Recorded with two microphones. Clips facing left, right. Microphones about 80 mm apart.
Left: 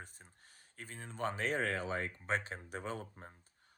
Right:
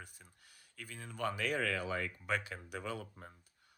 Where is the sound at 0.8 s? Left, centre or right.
Left.